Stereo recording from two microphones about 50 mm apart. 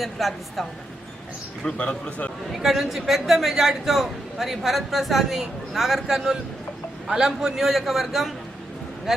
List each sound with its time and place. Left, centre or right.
0.0 s a man's voice: centre
1.6 s a man's voice: centre
2.5 s a man's voice: centre